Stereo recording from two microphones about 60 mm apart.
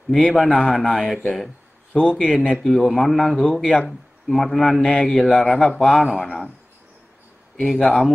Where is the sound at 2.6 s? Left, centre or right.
Centre.